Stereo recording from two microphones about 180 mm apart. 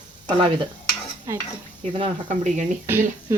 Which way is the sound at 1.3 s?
15° right (ahead or behind).